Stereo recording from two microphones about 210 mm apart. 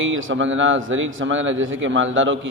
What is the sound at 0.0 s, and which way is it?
A man's voice, 65° right (ahead or behind).